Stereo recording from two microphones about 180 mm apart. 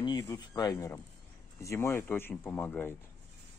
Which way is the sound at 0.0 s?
20° left (ahead or behind).